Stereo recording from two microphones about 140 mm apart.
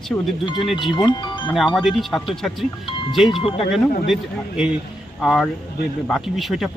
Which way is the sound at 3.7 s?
Centre (ahead or behind).